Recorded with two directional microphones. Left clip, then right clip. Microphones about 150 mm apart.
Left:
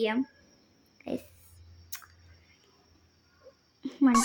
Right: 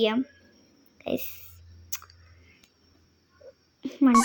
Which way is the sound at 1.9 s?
10° right (ahead or behind).